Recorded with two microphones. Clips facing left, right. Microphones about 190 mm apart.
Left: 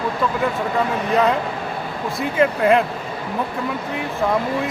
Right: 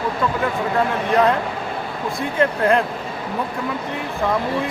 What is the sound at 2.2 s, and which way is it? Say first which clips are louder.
Speech: left 2 dB; 5° left (ahead or behind).